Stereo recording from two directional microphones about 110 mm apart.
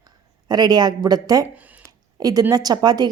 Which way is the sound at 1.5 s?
15° right (ahead or behind).